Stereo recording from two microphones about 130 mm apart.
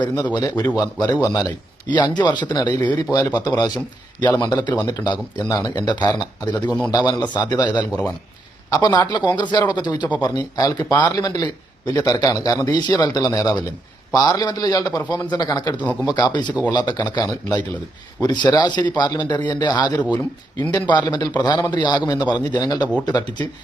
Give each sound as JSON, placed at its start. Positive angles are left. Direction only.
{"t": 0.0, "sound": "a man's voice", "side_deg": 30}